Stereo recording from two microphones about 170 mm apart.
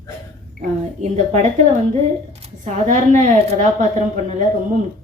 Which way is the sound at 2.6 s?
45° right (ahead or behind).